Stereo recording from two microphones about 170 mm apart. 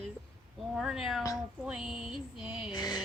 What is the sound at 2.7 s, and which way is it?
Music, 25° left (ahead or behind).